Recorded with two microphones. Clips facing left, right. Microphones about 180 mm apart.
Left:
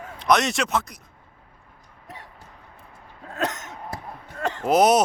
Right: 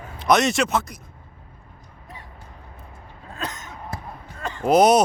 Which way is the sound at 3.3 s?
80° left.